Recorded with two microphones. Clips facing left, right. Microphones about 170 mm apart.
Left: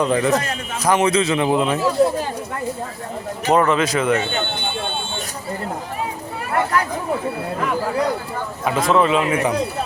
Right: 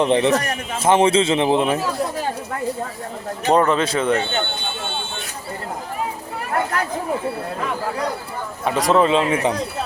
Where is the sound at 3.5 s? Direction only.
30° right (ahead or behind).